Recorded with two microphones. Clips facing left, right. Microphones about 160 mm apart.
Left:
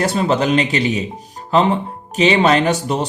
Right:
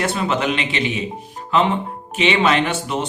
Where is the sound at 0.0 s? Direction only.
35° left (ahead or behind).